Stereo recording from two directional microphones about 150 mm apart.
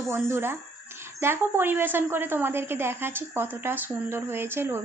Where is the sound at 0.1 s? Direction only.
15° right (ahead or behind).